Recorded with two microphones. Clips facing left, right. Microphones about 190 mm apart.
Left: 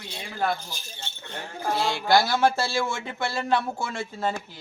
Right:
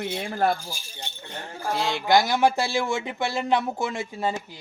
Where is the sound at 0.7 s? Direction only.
15° right (ahead or behind).